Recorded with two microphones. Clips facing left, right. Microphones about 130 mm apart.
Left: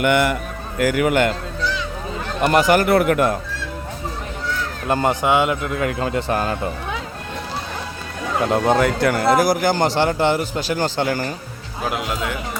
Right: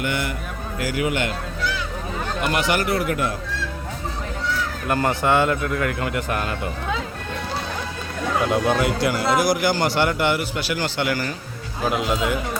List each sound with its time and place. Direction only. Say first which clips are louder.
0.0 s a man's voice: left 8 dB; 65° left (ahead or behind)
0.8 s a man's voice: left 7 dB; 55° left (ahead or behind)
2.4 s a man's voice: left 7 dB; 45° left (ahead or behind)
4.9 s a man's voice: left 2 dB; 25° left (ahead or behind)
8.8 s a man's voice: left 4 dB; 55° left (ahead or behind)
11.9 s speech: right 2 dB; centre (ahead or behind)